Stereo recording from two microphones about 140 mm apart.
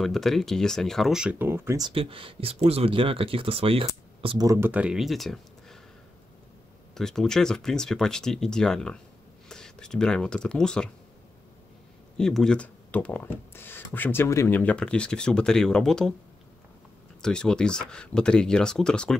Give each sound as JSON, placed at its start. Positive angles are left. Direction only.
{"t": 0.0, "sound": "speech", "side_deg": 0}
{"t": 1.4, "sound": "speech", "side_deg": -15}
{"t": 1.8, "sound": "speech", "side_deg": -40}
{"t": 4.4, "sound": "speech", "side_deg": -25}
{"t": 4.6, "sound": "speech", "side_deg": -10}
{"t": 7.0, "sound": "speech", "side_deg": 5}
{"t": 12.2, "sound": "speech", "side_deg": 5}
{"t": 17.2, "sound": "speech", "side_deg": 5}